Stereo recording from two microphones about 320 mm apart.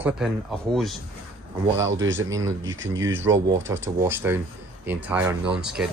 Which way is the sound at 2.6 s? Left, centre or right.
Right.